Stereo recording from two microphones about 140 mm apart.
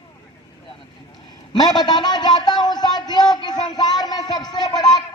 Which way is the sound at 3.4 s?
30° left (ahead or behind).